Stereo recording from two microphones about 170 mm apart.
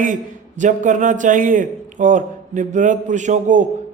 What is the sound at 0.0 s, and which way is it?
A man's voice, 50° right (ahead or behind).